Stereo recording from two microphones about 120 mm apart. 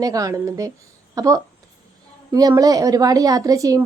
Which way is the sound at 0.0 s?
30° right (ahead or behind).